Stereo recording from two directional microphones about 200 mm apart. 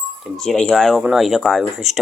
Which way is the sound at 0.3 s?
5° left (ahead or behind).